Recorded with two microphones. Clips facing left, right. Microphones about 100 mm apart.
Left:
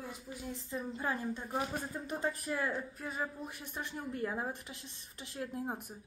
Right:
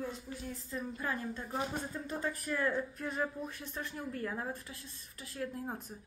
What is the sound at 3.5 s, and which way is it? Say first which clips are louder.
A woman's voice: even; 15° left (ahead or behind).